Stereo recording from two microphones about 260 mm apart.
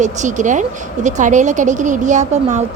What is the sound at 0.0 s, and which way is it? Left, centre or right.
A woman's voice, right.